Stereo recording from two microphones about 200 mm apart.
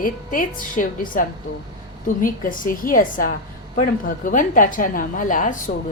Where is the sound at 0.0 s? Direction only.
45° left (ahead or behind).